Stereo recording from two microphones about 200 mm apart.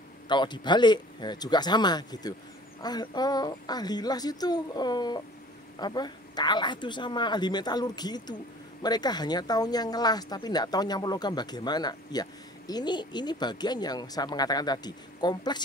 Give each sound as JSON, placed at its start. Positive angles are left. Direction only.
{"t": 0.3, "sound": "speech", "side_deg": 20}